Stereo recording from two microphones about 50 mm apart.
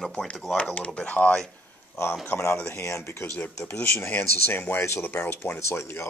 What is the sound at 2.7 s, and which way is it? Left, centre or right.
Speech, left.